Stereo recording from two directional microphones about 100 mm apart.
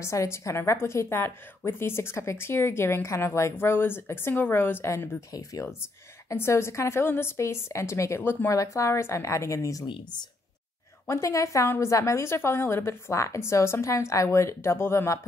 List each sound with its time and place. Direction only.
0.0 s a woman's voice: 30° left (ahead or behind)
11.1 s a woman's voice: 30° left (ahead or behind)